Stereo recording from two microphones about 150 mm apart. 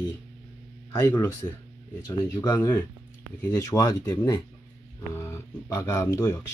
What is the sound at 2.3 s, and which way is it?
Speech, 25° left (ahead or behind).